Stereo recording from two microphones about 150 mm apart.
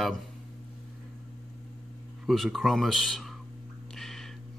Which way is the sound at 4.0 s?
Centre (ahead or behind).